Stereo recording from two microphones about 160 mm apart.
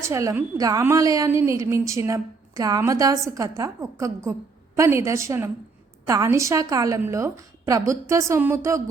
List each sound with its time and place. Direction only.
0.0 s a woman's voice: 20° right (ahead or behind)